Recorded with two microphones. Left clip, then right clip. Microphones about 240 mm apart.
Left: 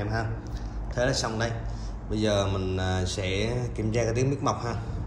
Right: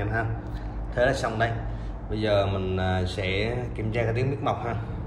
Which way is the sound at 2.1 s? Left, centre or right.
Centre.